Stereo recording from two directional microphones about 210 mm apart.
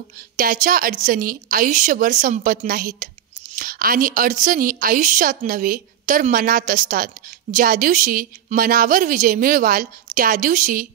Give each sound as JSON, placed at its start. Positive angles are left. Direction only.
{"t": 0.4, "sound": "a woman's voice", "side_deg": -40}